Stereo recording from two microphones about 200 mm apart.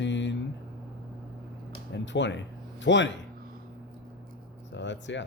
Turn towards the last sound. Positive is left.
turn(degrees=65)  # may be behind; listen again after turning